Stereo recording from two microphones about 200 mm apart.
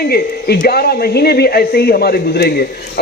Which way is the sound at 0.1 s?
50° left (ahead or behind).